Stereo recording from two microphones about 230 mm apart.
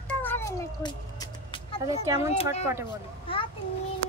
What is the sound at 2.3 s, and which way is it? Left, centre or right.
Speech, left.